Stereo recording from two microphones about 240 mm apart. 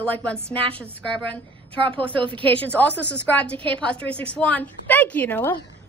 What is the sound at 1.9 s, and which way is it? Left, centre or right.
A woman's voice, centre.